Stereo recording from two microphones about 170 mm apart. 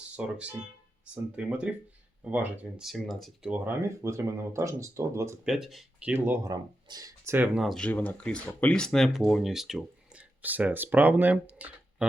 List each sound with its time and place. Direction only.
0.2 s speech: 10° right (ahead or behind)
3.5 s speech: 15° right (ahead or behind)
5.5 s speech: centre (ahead or behind)
6.1 s speech: 15° right (ahead or behind)
7.3 s speech: 10° right (ahead or behind)